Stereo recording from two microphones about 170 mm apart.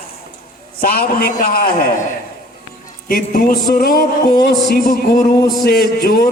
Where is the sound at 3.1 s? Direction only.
55° left (ahead or behind).